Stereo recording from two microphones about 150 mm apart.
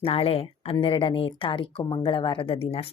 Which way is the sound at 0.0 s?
40° left (ahead or behind).